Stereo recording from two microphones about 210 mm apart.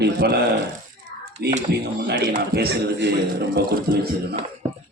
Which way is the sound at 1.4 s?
50° right (ahead or behind).